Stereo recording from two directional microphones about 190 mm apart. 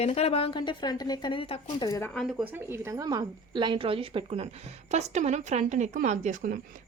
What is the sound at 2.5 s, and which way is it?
A woman's voice, 15° right (ahead or behind).